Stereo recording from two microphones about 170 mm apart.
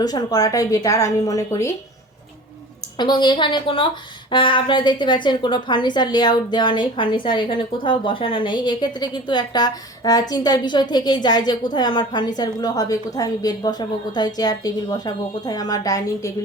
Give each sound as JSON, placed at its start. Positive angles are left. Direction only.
{"t": 0.0, "sound": "a woman's voice", "side_deg": 20}
{"t": 3.0, "sound": "a woman's voice", "side_deg": 25}